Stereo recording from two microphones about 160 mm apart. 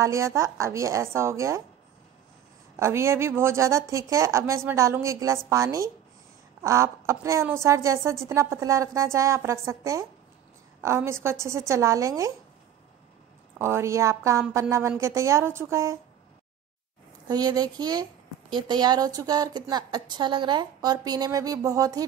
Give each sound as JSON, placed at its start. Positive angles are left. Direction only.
{"t": 0.0, "sound": "a woman's voice", "side_deg": -20}
{"t": 2.8, "sound": "a woman's voice", "side_deg": -15}
{"t": 13.6, "sound": "a woman's voice", "side_deg": -15}
{"t": 17.3, "sound": "a woman's voice", "side_deg": -25}